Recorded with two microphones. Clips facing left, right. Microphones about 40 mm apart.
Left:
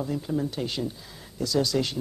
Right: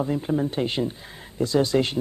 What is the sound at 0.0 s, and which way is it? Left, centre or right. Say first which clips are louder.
Speech: right 4 dB; right.